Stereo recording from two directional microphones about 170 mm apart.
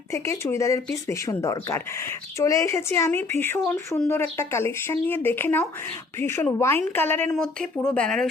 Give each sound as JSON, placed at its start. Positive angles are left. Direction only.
{"t": 0.1, "sound": "speech", "side_deg": 15}